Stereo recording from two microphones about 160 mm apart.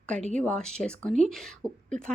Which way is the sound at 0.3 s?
5° left (ahead or behind).